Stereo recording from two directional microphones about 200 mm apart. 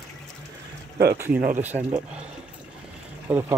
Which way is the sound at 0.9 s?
50° right (ahead or behind).